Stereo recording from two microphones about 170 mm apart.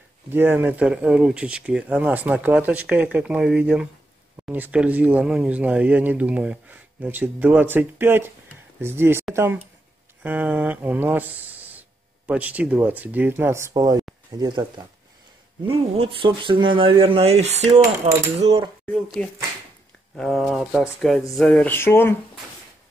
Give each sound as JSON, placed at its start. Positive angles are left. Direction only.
{"t": 0.3, "sound": "speech", "side_deg": -10}
{"t": 18.9, "sound": "speech", "side_deg": 0}
{"t": 21.4, "sound": "a sound", "side_deg": 5}